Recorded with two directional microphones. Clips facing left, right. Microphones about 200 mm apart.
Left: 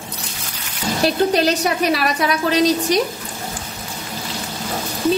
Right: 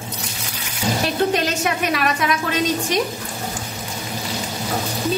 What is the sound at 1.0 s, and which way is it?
A woman's voice, 35° left (ahead or behind).